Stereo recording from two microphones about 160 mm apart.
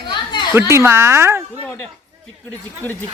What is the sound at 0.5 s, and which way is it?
Speech, 15° right (ahead or behind).